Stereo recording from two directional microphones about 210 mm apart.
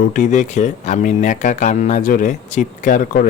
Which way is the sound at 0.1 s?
35° left (ahead or behind).